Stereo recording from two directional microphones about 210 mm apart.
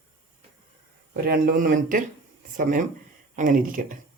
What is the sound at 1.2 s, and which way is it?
Speech, 45° right (ahead or behind).